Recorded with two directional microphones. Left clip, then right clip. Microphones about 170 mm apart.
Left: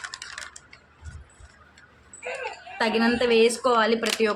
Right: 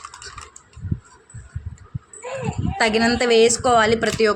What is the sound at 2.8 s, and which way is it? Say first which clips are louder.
Speech: right 4 dB; 30° right (ahead or behind).